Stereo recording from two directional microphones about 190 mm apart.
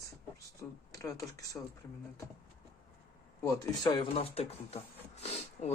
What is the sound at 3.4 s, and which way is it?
Speech, 15° left (ahead or behind).